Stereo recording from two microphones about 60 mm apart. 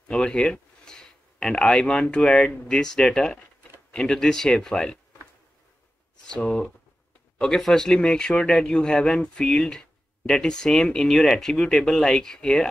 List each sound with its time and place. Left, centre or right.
0.1 s speech: centre
6.2 s speech: centre